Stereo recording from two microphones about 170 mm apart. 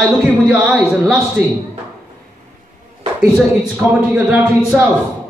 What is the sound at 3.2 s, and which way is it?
A man's voice, 5° right (ahead or behind).